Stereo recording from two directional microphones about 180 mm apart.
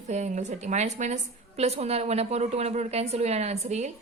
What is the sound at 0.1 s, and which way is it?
A woman's voice, 40° right (ahead or behind).